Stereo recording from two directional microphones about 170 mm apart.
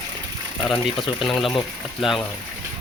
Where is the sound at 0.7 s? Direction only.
30° left (ahead or behind).